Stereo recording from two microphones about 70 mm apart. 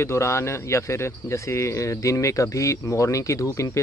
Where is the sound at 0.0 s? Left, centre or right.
Left.